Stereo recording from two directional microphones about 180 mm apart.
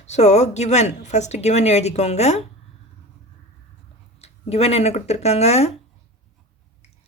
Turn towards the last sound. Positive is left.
turn(degrees=35)  # may be behind; listen again after turning